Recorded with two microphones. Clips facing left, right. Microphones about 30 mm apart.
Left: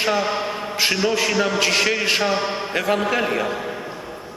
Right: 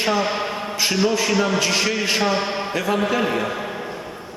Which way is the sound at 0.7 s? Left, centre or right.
Left.